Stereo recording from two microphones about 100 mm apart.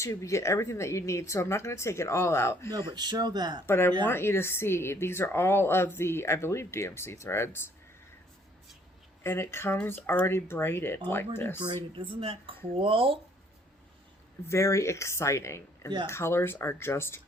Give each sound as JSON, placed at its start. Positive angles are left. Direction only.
{"t": 0.0, "sound": "speech", "side_deg": 30}
{"t": 2.7, "sound": "speech", "side_deg": -45}
{"t": 3.7, "sound": "speech", "side_deg": 25}
{"t": 9.2, "sound": "speech", "side_deg": 25}
{"t": 11.9, "sound": "speech", "side_deg": -60}
{"t": 14.4, "sound": "speech", "side_deg": 30}